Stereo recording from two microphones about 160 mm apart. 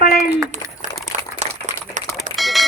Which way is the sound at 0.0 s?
70° left (ahead or behind).